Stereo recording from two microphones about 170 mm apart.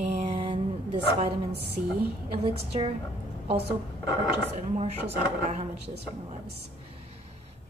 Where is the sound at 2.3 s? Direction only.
35° right (ahead or behind).